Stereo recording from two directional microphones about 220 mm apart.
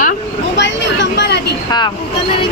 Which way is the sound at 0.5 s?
55° left (ahead or behind).